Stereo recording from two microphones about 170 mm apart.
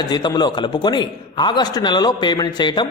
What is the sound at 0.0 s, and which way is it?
A man's voice, 25° left (ahead or behind).